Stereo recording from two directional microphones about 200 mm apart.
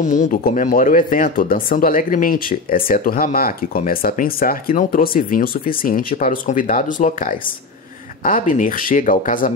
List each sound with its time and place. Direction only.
0.0 s speech: 40° left (ahead or behind)